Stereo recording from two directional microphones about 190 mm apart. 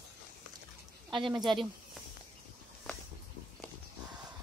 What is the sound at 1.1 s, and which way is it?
Speech, 25° right (ahead or behind).